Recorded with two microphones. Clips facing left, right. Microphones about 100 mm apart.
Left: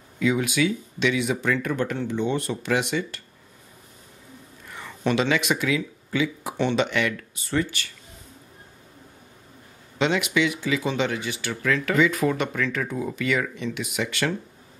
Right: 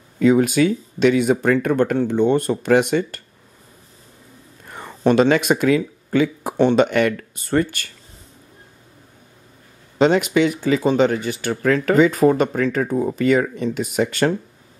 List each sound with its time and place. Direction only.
0.2 s speech: 45° right (ahead or behind)
4.6 s speech: 40° right (ahead or behind)
9.9 s speech: 40° right (ahead or behind)